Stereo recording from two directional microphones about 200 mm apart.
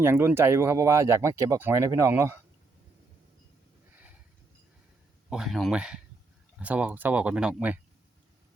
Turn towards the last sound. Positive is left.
turn(degrees=-5)  # may be behind; listen again after turning